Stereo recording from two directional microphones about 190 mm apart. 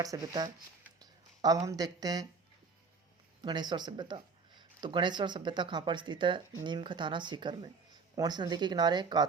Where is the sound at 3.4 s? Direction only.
20° right (ahead or behind).